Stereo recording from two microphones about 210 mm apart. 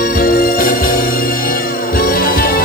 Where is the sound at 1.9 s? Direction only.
45° left (ahead or behind).